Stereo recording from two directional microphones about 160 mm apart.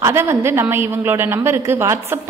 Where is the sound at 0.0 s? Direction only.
15° right (ahead or behind).